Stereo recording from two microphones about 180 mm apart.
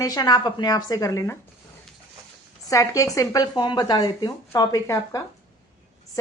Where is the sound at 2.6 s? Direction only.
20° left (ahead or behind).